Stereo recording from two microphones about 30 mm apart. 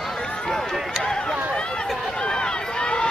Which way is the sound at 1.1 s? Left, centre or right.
Left.